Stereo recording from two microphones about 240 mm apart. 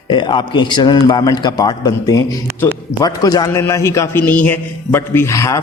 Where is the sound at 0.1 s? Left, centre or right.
Centre.